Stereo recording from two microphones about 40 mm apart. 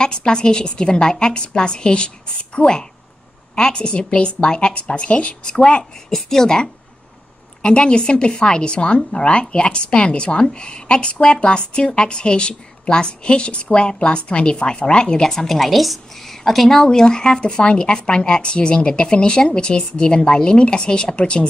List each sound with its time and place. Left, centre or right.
0.0 s a woman's voice: centre
6.0 s a woman's voice: centre; by 21.5 s left